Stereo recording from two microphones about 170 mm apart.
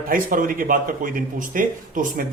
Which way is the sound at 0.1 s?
55° right (ahead or behind).